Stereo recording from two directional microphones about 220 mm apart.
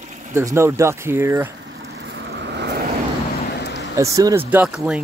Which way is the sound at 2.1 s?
50° right (ahead or behind).